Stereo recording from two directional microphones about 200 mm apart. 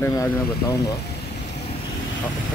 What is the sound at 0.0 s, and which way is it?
Speech, 15° left (ahead or behind).